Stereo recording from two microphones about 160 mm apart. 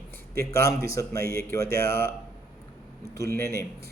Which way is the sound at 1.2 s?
65° right (ahead or behind).